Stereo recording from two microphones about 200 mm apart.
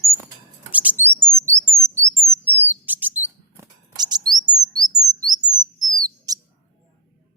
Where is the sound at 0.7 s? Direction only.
10° right (ahead or behind).